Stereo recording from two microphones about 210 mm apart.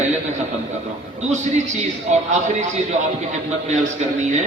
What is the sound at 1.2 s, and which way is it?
A man's voice, 35° right (ahead or behind).